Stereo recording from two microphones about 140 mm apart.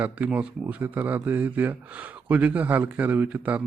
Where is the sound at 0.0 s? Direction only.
10° right (ahead or behind).